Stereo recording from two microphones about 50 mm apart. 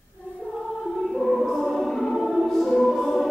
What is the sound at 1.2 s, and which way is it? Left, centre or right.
Music, centre.